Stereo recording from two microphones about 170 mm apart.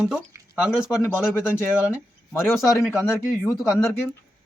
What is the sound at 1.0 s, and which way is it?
Speech, 15° left (ahead or behind).